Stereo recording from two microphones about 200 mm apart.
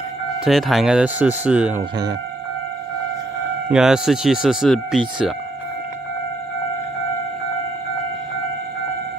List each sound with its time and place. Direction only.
0.5 s speech: centre (ahead or behind)
1.8 s speech: 20° right (ahead or behind)
3.7 s speech: 5° right (ahead or behind)